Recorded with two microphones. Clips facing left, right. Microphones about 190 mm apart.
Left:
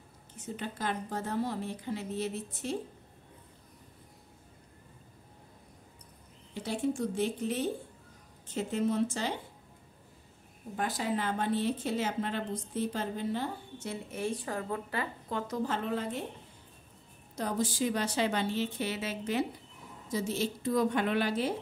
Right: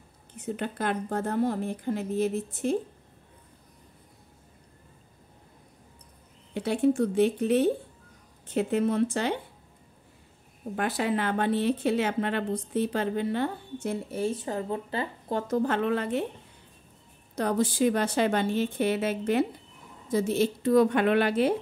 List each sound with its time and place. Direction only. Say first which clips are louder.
0.4 s a woman's voice: right 6 dB; 60° right (ahead or behind)
6.5 s a woman's voice: right 8 dB; 65° right (ahead or behind)
10.8 s a woman's voice: right 5 dB; 70° right (ahead or behind)
14.1 s speech: right 3 dB; 25° right (ahead or behind)
15.3 s a woman's voice: right 7 dB; 50° right (ahead or behind); by 16.2 s 70° right (ahead or behind)
17.4 s a woman's voice: right 6 dB; 65° right (ahead or behind)